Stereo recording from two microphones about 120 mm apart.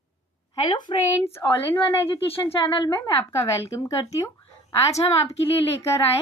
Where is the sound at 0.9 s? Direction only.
45° left (ahead or behind).